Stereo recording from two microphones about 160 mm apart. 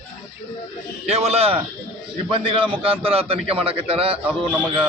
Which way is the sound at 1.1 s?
40° right (ahead or behind).